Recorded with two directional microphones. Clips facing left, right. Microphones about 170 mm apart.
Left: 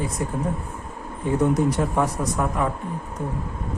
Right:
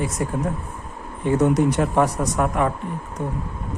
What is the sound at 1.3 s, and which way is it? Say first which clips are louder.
Speech: right 2 dB; 70° right (ahead or behind).